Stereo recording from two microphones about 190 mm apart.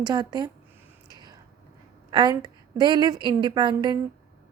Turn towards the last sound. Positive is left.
turn(degrees=-25)  # may be behind; listen again after turning